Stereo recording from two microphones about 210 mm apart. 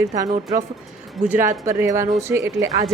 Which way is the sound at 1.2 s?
10° right (ahead or behind).